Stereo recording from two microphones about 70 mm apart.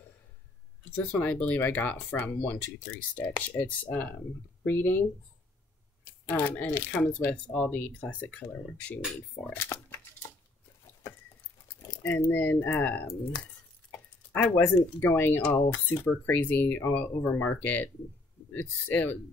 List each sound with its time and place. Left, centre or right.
0.9 s speech: left
6.2 s speech: left
9.6 s speech: left
12.0 s speech: left